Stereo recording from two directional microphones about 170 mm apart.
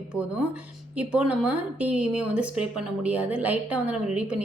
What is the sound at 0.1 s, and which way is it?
Speech, 5° right (ahead or behind).